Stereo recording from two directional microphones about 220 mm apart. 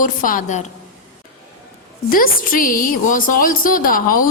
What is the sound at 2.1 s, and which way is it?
A woman's voice, 40° left (ahead or behind).